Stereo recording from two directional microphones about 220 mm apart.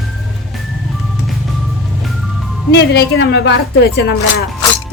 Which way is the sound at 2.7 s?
50° left (ahead or behind).